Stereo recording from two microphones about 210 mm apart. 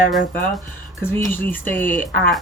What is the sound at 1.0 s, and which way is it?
Speech, 10° left (ahead or behind).